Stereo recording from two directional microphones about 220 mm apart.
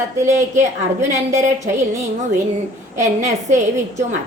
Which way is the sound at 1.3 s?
35° right (ahead or behind).